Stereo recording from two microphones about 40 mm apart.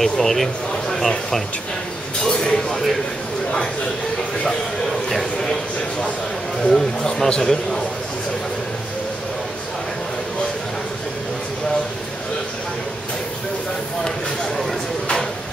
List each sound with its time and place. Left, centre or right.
0.0 s speech: centre
2.2 s chink: centre
6.7 s speech: centre